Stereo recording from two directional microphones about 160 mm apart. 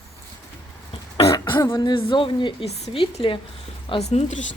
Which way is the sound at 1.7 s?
30° left (ahead or behind).